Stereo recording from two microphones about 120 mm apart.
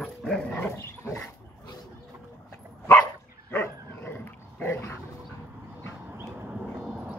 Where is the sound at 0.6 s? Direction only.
20° left (ahead or behind).